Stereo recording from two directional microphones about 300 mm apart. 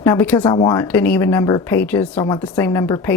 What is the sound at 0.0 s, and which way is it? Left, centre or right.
Speech, centre.